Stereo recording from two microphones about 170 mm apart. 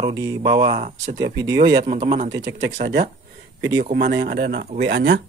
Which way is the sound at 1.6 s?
70° right (ahead or behind).